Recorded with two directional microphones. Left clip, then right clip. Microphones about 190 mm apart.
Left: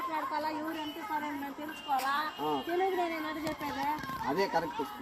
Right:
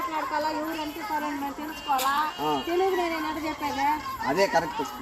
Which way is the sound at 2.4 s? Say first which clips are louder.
Right 6 dB; 10° right (ahead or behind).